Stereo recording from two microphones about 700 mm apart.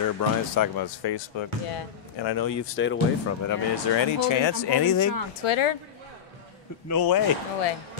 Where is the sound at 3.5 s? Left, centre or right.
Left.